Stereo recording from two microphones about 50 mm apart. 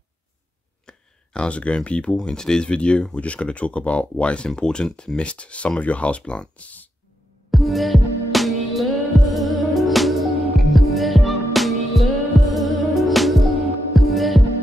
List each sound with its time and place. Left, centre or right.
0.8 s a sound: centre
2.1 s speech: centre; by 6.9 s left
7.5 s music: centre
13.9 s heart sounds: centre